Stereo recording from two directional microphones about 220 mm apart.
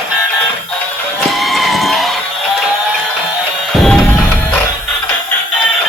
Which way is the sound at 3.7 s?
Centre (ahead or behind).